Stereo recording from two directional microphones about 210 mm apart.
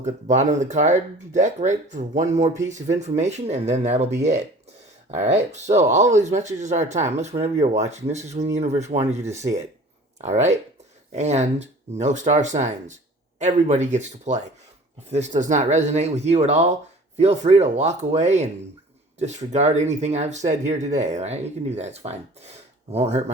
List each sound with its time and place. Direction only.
0.0 s speech: 35° right (ahead or behind)
11.1 s speech: 30° right (ahead or behind)
19.5 s speech: 35° right (ahead or behind)